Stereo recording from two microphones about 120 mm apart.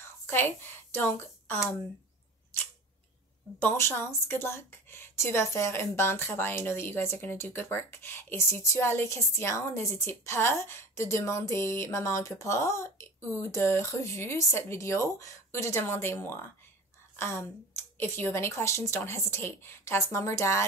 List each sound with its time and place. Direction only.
0.0 s speech: 20° left (ahead or behind)
3.5 s speech: 20° left (ahead or behind)